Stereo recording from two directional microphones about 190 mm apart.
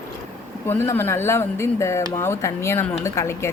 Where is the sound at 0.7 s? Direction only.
10° left (ahead or behind).